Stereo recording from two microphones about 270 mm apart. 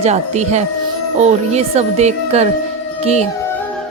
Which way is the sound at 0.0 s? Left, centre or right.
Right.